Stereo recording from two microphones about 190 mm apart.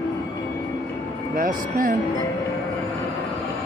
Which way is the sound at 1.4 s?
45° right (ahead or behind).